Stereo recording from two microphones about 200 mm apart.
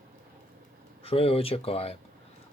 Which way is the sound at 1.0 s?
30° left (ahead or behind).